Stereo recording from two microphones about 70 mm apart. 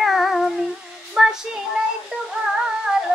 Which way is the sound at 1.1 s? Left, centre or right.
Centre.